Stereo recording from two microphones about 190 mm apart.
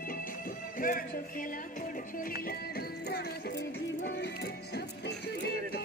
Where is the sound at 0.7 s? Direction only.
45° left (ahead or behind).